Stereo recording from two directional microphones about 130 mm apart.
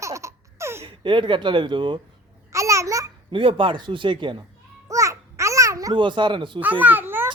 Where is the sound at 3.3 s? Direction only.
40° right (ahead or behind).